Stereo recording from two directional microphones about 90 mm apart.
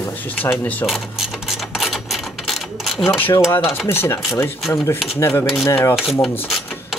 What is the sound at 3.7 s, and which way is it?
Speech, 25° left (ahead or behind).